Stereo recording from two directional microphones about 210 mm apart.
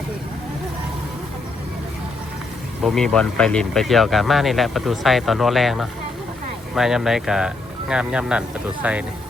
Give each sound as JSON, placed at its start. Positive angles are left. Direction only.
{"t": 2.8, "sound": "speech", "side_deg": 0}